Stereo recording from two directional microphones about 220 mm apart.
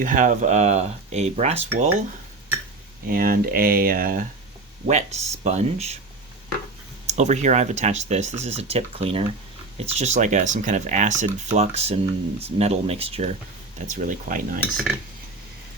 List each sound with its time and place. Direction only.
0.0 s speech: 35° right (ahead or behind)
3.1 s speech: 40° right (ahead or behind)
4.9 s speech: 30° right (ahead or behind)
7.1 s speech: 30° right (ahead or behind)